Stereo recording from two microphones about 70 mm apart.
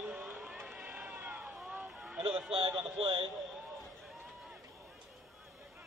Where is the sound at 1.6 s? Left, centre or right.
Centre.